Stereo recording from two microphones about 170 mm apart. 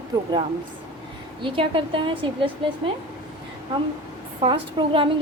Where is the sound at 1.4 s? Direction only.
30° right (ahead or behind).